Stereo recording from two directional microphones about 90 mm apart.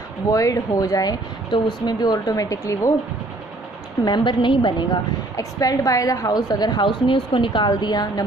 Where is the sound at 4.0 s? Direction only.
60° left (ahead or behind).